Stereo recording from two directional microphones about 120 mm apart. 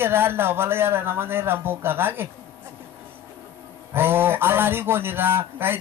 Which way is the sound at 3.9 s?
20° right (ahead or behind).